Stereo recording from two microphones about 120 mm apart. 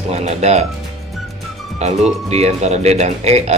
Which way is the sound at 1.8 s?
65° right (ahead or behind).